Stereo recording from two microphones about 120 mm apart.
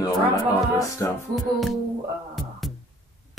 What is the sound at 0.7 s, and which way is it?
Speech, 30° left (ahead or behind).